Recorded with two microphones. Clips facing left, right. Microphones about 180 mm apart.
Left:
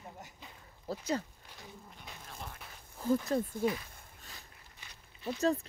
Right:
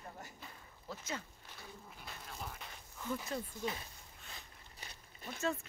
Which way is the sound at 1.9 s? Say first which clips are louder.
Even; centre (ahead or behind).